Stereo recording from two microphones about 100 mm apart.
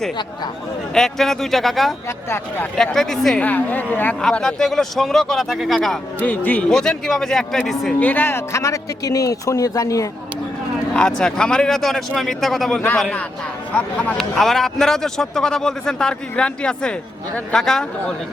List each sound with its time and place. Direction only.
0.9 s speech: 5° left (ahead or behind)
3.4 s a man's voice: 15° left (ahead or behind)
4.2 s speech: 5° left (ahead or behind)
6.1 s a man's voice: 15° left (ahead or behind)
7.9 s speech: 20° left (ahead or behind); by 10.1 s 35° left (ahead or behind)
10.9 s a man's voice: 10° left (ahead or behind)